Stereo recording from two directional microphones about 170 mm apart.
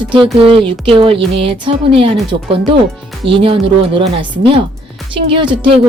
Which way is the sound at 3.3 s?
30° right (ahead or behind).